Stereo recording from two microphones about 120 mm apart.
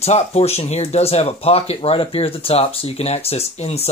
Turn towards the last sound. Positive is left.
turn(degrees=60)  # may be behind; listen again after turning